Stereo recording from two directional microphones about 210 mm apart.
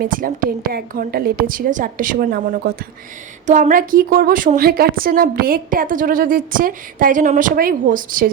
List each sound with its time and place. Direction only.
0.0 s a woman's voice: 40° right (ahead or behind)